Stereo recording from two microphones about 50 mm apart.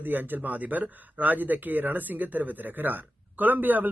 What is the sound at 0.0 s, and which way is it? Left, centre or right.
Speech, right.